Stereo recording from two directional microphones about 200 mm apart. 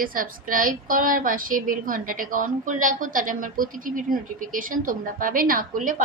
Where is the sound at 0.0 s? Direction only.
45° right (ahead or behind).